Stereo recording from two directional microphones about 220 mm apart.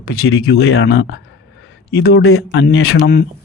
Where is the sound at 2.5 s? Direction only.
60° left (ahead or behind).